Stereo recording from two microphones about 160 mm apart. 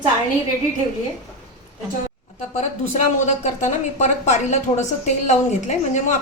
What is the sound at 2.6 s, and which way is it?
A woman's voice, 45° left (ahead or behind).